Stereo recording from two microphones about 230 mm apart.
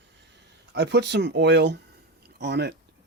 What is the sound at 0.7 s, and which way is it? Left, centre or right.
Speech, right.